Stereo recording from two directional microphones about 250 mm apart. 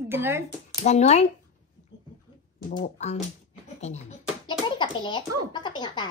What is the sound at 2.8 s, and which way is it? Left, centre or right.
Speech, left.